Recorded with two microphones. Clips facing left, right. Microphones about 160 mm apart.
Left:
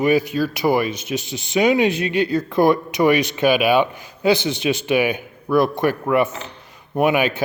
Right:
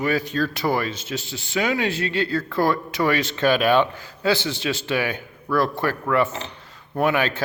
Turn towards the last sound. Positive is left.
turn(degrees=15)  # may be behind; listen again after turning